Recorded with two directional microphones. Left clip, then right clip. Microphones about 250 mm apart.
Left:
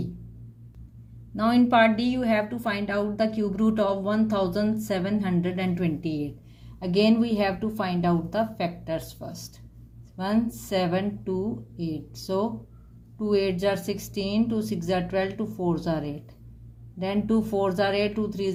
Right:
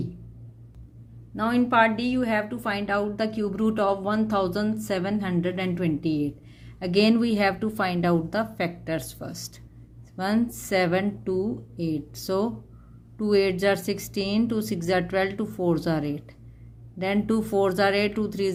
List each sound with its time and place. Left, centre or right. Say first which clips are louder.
1.4 s a woman's voice: left 1 dB; centre; by 18.5 s right